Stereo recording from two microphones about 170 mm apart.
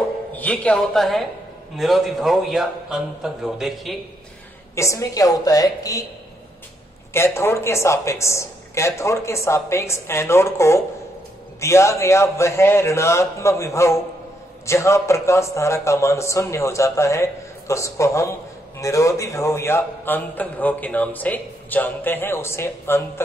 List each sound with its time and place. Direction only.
0.4 s a man's voice: 10° left (ahead or behind)
4.7 s a woman's voice: 20° left (ahead or behind)
7.2 s a man's voice: 15° left (ahead or behind)